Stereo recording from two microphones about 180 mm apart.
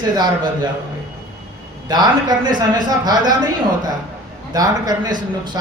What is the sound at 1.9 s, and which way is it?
Speech, 25° right (ahead or behind).